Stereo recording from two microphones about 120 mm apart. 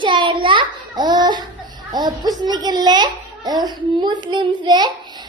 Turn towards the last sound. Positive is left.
turn(degrees=-40)  # may be behind; listen again after turning